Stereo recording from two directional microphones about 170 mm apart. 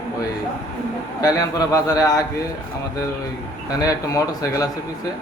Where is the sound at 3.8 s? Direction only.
20° left (ahead or behind).